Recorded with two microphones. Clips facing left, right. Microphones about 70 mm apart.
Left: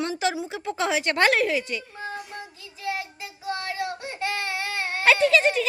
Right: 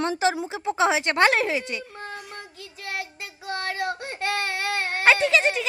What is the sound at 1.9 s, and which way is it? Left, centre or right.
Child singing, right.